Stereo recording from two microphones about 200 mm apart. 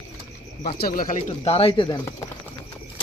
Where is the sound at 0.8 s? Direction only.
45° left (ahead or behind).